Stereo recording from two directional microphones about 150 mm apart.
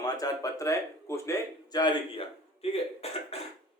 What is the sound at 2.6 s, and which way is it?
Speech, 40° left (ahead or behind).